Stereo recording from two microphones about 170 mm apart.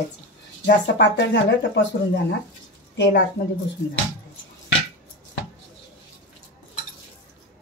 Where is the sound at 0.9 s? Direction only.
90° left.